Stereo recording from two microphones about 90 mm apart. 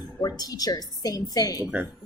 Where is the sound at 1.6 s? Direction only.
15° right (ahead or behind).